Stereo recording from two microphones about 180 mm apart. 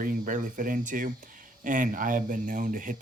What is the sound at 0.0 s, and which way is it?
Speech, 50° right (ahead or behind).